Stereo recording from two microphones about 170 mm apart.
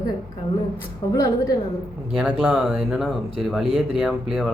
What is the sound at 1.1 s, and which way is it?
Speech, 20° left (ahead or behind).